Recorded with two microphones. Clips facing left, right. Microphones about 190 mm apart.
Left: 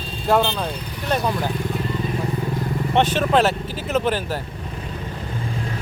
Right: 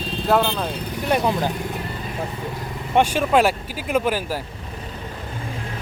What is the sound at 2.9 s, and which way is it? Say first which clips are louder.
Speech: right 1 dB; 10° right (ahead or behind).